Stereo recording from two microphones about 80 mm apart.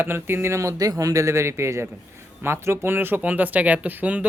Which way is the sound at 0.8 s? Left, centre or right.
Right.